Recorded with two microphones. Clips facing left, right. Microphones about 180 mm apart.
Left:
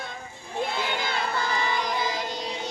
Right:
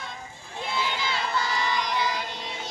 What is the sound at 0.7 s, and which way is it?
Child singing, 55° left (ahead or behind).